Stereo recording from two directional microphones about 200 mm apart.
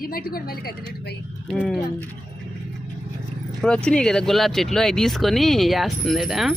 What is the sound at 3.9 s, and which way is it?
Speech, 5° left (ahead or behind).